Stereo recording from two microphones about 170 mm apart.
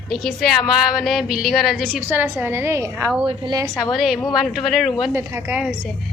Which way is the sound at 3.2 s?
25° right (ahead or behind).